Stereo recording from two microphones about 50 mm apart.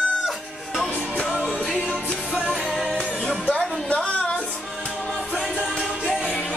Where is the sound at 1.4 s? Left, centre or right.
Centre.